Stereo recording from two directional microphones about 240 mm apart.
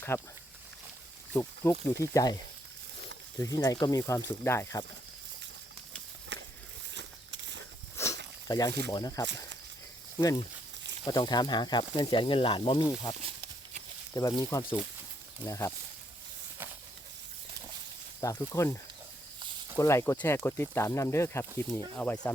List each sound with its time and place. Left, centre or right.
0.1 s speech: centre
1.3 s speech: centre
3.4 s speech: centre
6.3 s a sound: right
8.0 s a sound: centre
8.4 s speech: centre
18.2 s speech: centre